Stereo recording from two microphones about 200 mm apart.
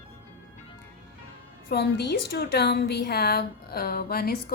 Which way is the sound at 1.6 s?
55° left (ahead or behind).